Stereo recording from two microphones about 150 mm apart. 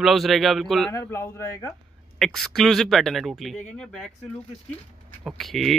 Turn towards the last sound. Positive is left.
turn(degrees=0)  # may be behind; listen again after turning